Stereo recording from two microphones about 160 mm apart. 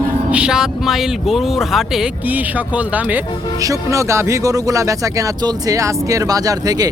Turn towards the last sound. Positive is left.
turn(degrees=-25)  # may be behind; listen again after turning